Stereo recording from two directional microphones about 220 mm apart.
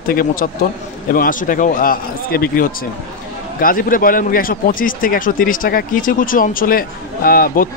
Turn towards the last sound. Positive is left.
turn(degrees=40)  # may be behind; listen again after turning